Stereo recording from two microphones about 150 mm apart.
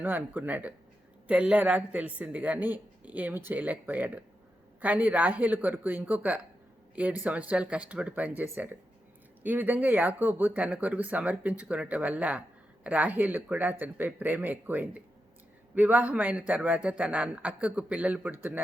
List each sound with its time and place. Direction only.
0.0 s speech: 10° right (ahead or behind)